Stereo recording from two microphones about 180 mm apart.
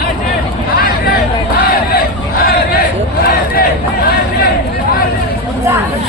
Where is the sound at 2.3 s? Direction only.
55° left (ahead or behind).